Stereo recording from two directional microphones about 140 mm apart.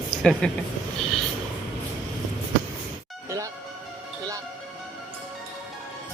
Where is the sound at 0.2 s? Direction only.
5° left (ahead or behind).